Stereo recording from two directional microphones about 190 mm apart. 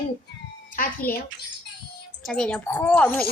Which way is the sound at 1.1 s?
50° left (ahead or behind).